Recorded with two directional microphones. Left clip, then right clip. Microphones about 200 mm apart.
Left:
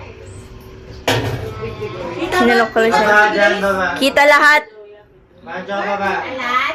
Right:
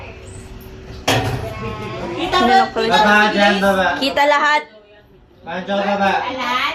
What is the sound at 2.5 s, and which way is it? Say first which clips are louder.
Speech: left 2 dB; 15° left (ahead or behind).